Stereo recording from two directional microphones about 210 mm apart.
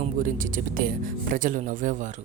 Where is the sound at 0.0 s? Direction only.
40° right (ahead or behind).